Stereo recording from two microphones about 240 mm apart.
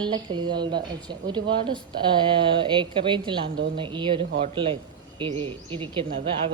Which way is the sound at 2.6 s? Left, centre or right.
Centre.